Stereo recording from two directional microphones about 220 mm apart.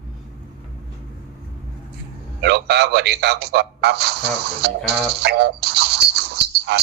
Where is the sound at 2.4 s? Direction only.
50° right (ahead or behind).